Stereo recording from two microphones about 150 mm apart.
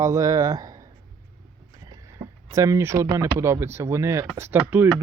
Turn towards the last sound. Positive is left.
turn(degrees=-15)  # may be behind; listen again after turning